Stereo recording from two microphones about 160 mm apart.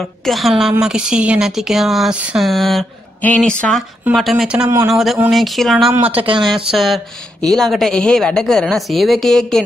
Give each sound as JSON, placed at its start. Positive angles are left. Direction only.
{"t": 0.3, "sound": "a woman's voice", "side_deg": 0}
{"t": 6.1, "sound": "speech", "side_deg": -35}
{"t": 7.4, "sound": "a woman's voice", "side_deg": 0}